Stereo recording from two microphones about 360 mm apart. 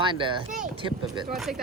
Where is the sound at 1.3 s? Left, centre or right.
Centre.